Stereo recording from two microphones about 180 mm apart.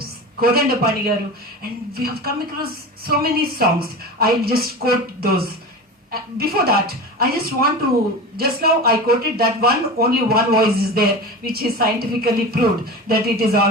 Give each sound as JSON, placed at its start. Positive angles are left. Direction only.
{"t": 0.0, "sound": "a woman's voice", "side_deg": -55}